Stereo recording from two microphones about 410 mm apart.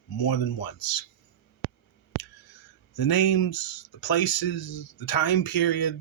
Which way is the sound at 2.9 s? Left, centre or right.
Left.